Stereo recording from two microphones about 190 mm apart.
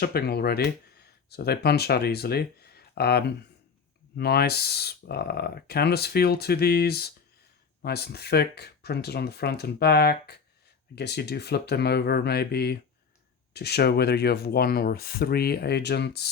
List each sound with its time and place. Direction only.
0.0 s speech: 55° left (ahead or behind)